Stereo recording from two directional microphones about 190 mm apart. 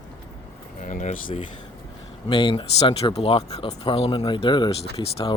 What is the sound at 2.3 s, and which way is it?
Speech, 25° left (ahead or behind).